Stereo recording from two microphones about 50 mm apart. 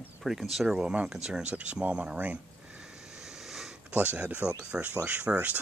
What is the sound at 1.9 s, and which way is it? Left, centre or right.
Speech, right.